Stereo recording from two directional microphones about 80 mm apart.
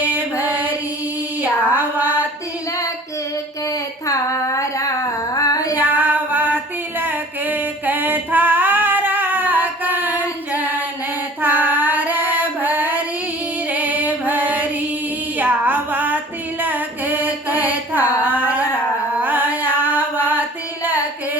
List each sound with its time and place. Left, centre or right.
0.0 s music: right
1.4 s female singing: right
3.7 s a sound: left
5.3 s female singing: left
5.7 s female singing: right
7.0 s a sound: right
10.5 s singing: right
11.3 s female singing: right
19.2 s music: right